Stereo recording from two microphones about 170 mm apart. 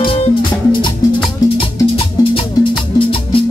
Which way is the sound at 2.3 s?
30° left (ahead or behind).